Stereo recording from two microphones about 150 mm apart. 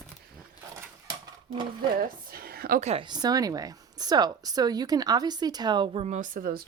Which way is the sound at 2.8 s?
45° right (ahead or behind).